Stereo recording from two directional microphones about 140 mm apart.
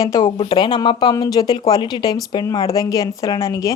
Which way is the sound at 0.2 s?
35° left (ahead or behind).